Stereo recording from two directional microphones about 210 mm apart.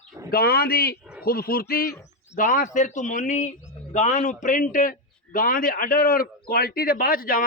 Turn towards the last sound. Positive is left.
turn(degrees=45)  # may be behind; listen again after turning